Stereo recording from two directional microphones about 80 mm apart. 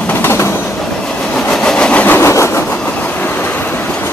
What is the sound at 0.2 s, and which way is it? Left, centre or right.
Train, left.